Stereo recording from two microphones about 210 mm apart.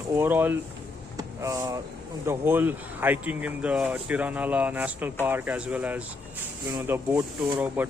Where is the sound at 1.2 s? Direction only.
15° right (ahead or behind).